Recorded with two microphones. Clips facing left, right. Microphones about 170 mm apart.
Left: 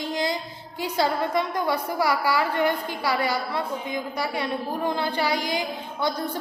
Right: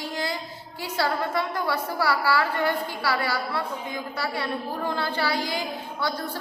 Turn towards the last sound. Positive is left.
turn(degrees=20)  # may be behind; listen again after turning